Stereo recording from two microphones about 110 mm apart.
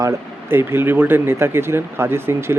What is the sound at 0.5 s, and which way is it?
Speech, 20° right (ahead or behind).